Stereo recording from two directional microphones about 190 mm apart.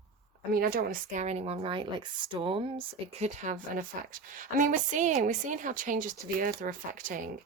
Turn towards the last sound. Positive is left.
turn(degrees=-45)  # may be behind; listen again after turning